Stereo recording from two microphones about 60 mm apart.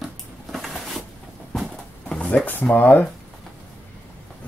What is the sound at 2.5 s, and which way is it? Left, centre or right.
Speech, left.